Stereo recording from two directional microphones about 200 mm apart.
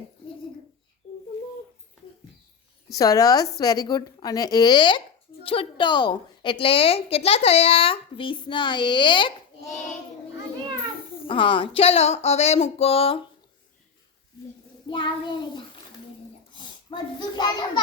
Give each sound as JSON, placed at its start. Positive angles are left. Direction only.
{"t": 3.0, "sound": "a woman's voice", "side_deg": 15}
{"t": 11.3, "sound": "speech", "side_deg": 25}
{"t": 14.8, "sound": "child singing", "side_deg": 25}
{"t": 16.5, "sound": "child singing", "side_deg": 25}